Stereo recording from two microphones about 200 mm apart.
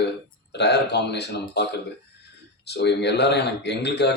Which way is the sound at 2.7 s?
60° left (ahead or behind).